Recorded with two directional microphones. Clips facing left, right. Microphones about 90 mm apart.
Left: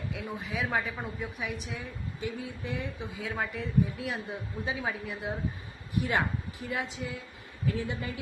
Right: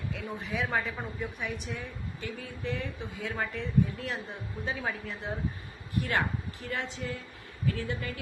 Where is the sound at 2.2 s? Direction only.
15° left (ahead or behind).